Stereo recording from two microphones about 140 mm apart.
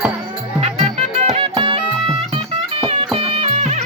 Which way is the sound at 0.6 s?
50° right (ahead or behind).